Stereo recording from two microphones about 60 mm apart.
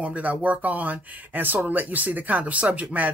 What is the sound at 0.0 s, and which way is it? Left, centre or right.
Speech, right.